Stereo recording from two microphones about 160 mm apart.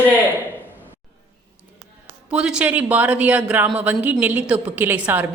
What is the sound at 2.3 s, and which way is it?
Speech, 5° right (ahead or behind).